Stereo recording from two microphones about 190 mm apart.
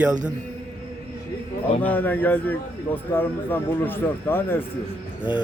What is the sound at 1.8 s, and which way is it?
A man's voice, 10° left (ahead or behind).